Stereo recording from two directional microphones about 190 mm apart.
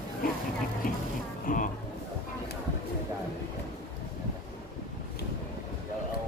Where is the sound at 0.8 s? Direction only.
45° left (ahead or behind).